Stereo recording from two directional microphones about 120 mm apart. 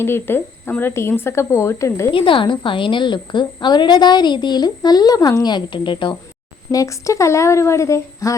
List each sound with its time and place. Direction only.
0.0 s speech: 20° left (ahead or behind)
2.1 s a woman's voice: 45° left (ahead or behind)
6.7 s speech: 25° left (ahead or behind)